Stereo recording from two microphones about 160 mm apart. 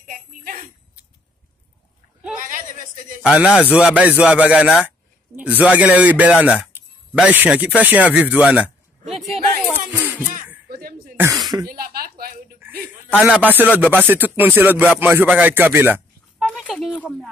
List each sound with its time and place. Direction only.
0.0 s jingle bell: 60° right (ahead or behind)
3.2 s speech: 5° right (ahead or behind)
9.8 s music: 10° right (ahead or behind)
10.7 s a sound: 65° right (ahead or behind)
11.1 s speech: 20° right (ahead or behind)
11.7 s speech: 70° right (ahead or behind)
12.5 s a sound: 10° right (ahead or behind)
13.2 s speech: 10° right (ahead or behind)
16.4 s speech: 5° left (ahead or behind)